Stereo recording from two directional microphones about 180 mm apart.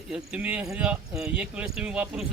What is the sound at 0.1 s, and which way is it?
A man's voice, 5° right (ahead or behind).